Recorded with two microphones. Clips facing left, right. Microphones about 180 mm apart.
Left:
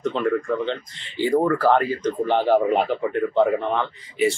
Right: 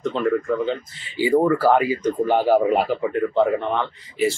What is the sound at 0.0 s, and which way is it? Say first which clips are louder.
Speech: right 1 dB; centre (ahead or behind).